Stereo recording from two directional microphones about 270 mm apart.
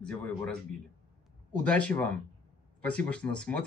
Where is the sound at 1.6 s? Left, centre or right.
Centre.